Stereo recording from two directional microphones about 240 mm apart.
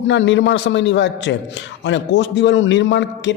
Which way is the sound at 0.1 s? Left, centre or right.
Left.